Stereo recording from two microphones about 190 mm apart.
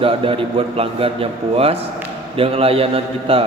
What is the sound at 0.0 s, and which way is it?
A man's voice, 30° right (ahead or behind).